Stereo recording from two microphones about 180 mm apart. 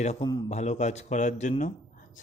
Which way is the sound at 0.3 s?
25° left (ahead or behind).